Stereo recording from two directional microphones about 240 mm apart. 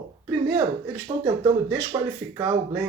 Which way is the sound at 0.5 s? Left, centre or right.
Centre.